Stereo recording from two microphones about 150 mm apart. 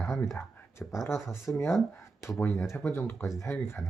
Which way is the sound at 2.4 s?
20° left (ahead or behind).